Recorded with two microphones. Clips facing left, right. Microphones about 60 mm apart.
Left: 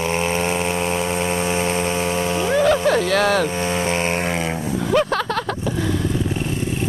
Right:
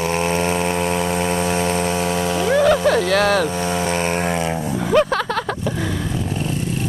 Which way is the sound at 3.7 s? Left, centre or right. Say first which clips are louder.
Right 1 dB; left.